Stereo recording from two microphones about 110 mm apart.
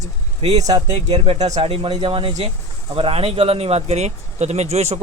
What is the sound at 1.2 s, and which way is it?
Speech, 70° right (ahead or behind).